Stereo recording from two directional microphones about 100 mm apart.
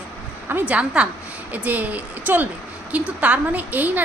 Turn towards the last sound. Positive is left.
turn(degrees=-15)  # may be behind; listen again after turning